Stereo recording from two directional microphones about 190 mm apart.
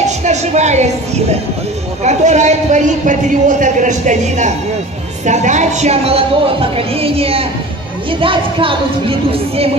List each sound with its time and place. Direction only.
0.2 s a woman's voice: 35° right (ahead or behind)